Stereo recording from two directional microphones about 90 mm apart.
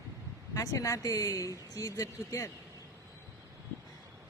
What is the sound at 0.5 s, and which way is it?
Speech, 40° left (ahead or behind).